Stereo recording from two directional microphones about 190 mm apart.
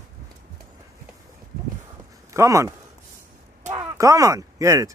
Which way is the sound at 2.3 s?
15° right (ahead or behind).